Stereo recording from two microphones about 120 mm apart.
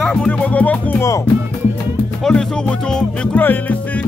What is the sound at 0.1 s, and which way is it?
Music, 10° left (ahead or behind).